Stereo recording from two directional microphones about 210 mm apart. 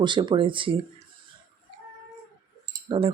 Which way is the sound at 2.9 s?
25° right (ahead or behind).